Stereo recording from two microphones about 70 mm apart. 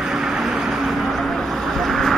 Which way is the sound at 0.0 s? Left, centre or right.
Centre.